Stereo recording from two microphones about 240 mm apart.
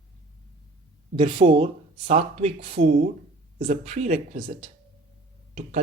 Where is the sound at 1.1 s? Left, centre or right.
Right.